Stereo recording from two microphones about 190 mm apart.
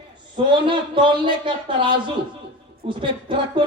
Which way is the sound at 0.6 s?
25° right (ahead or behind).